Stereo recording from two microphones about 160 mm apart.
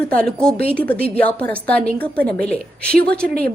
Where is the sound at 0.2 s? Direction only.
5° left (ahead or behind).